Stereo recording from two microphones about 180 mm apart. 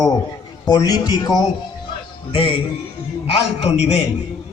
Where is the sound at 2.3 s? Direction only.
30° left (ahead or behind).